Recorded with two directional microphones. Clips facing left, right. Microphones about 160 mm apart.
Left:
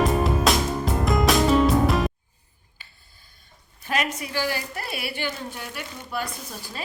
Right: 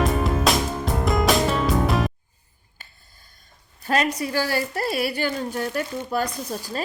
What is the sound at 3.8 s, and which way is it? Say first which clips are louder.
A woman's voice: right 5 dB; 35° right (ahead or behind).